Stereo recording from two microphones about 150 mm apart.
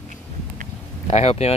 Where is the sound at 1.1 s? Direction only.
45° left (ahead or behind).